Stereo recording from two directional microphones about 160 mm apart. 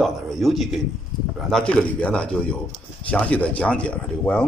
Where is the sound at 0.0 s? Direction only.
Centre (ahead or behind).